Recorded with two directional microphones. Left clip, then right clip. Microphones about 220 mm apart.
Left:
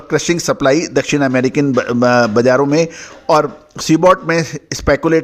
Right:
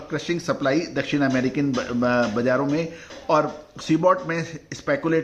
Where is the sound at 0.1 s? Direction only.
45° left (ahead or behind).